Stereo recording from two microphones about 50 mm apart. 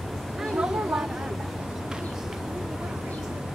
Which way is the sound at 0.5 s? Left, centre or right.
Centre.